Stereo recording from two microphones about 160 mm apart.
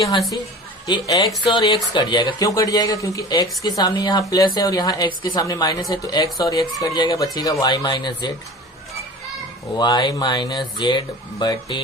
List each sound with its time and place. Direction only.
0.9 s a woman's voice: 25° left (ahead or behind)
9.7 s a woman's voice: 25° left (ahead or behind)